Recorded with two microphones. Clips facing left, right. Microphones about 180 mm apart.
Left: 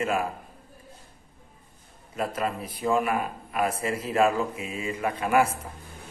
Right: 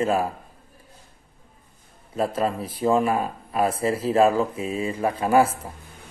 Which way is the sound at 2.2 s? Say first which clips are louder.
Right 5 dB; 30° right (ahead or behind).